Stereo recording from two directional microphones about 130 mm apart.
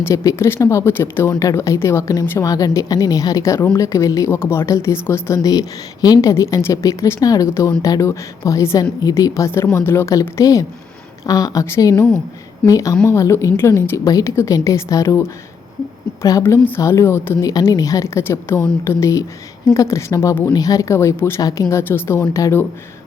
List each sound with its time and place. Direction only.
0.0 s speech: 20° left (ahead or behind)
16.4 s speech: 15° left (ahead or behind)